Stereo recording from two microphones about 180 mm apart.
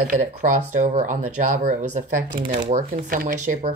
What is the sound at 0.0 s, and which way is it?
Speech, 45° right (ahead or behind).